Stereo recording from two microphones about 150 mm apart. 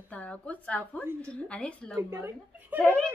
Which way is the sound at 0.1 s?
10° left (ahead or behind).